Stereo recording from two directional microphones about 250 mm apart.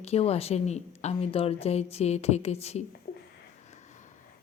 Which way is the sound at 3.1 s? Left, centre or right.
Left.